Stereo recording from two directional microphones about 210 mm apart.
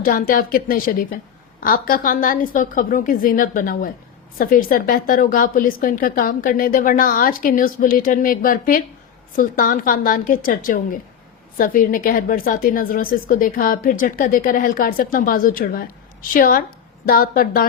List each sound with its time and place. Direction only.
0.0 s a woman's voice: 40° left (ahead or behind)